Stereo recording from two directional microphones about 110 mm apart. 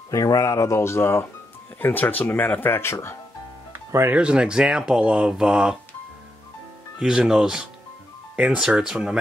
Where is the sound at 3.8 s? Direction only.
25° right (ahead or behind).